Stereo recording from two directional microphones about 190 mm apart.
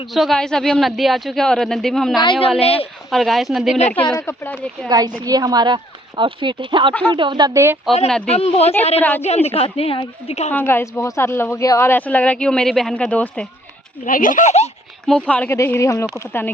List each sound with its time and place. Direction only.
0.1 s speech: centre (ahead or behind)
2.6 s a woman's voice: 30° left (ahead or behind)
3.1 s speech: centre (ahead or behind)
4.2 s speech: 10° left (ahead or behind)
4.9 s speech: 20° right (ahead or behind)
8.3 s a woman's voice: 35° left (ahead or behind)
9.0 s speech: 10° left (ahead or behind)
9.2 s a woman's voice: 35° left (ahead or behind)
10.5 s speech: 10° left (ahead or behind)
14.0 s speech: 45° left (ahead or behind)
15.0 s speech: 5° left (ahead or behind)